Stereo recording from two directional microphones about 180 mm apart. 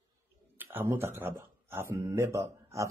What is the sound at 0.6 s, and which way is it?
Speech, 10° right (ahead or behind).